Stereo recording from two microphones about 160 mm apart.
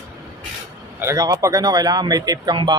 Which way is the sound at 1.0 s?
20° right (ahead or behind).